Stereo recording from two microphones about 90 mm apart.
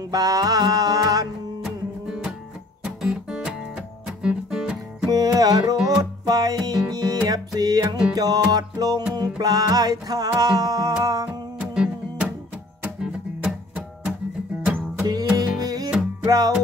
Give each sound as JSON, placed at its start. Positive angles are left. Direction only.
{"t": 0.1, "sound": "music", "side_deg": -45}
{"t": 1.6, "sound": "music", "side_deg": -5}
{"t": 2.8, "sound": "guitar", "side_deg": -5}
{"t": 4.2, "sound": "music", "side_deg": -5}
{"t": 5.1, "sound": "music", "side_deg": -45}
{"t": 11.7, "sound": "music", "side_deg": -10}
{"t": 15.3, "sound": "music", "side_deg": -45}